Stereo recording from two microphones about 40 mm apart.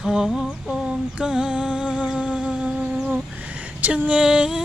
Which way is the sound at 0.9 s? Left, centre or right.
Centre.